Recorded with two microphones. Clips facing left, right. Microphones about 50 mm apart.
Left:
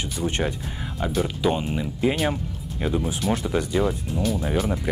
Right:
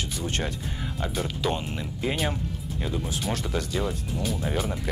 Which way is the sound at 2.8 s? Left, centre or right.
Left.